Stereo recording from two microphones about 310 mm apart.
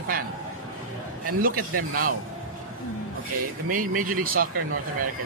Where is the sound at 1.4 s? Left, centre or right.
Right.